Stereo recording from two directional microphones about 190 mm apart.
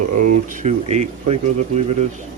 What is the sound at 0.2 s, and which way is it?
Speech, 40° right (ahead or behind).